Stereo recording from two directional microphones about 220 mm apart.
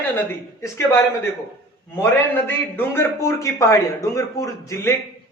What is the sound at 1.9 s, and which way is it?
A man's voice, 10° left (ahead or behind).